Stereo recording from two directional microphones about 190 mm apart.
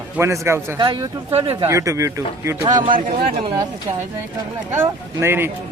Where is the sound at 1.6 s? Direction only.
15° right (ahead or behind).